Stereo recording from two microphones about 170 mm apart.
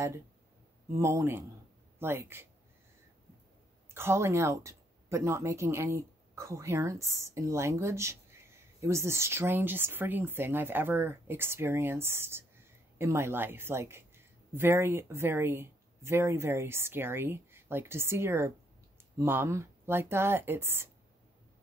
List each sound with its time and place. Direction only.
0.9 s speech: 15° right (ahead or behind)
3.9 s a woman's voice: 15° right (ahead or behind)